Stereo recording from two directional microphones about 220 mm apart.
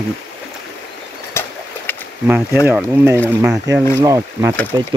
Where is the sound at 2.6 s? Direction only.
10° right (ahead or behind).